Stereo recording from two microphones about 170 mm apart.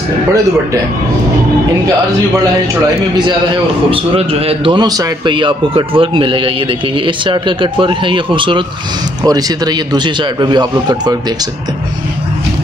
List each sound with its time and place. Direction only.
3.9 s a man's voice: 35° right (ahead or behind)